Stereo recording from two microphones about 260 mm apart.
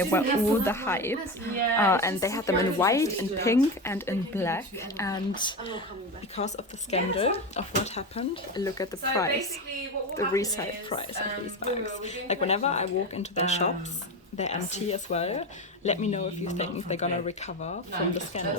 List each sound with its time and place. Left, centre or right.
0.0 s a woman's voice: centre; by 8.6 s left
8.6 s a woman's voice: centre